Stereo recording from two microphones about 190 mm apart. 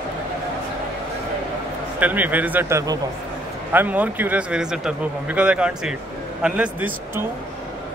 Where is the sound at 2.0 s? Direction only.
10° right (ahead or behind).